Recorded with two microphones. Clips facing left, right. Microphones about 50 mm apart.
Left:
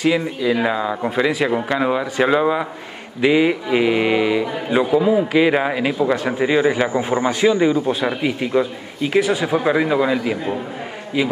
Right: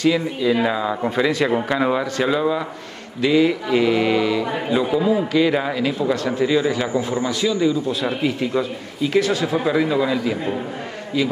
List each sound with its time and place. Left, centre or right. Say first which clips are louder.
0.0 s speech: even; centre
2.1 s speech: left 3 dB; left
8.1 s speech: left 1 dB; centre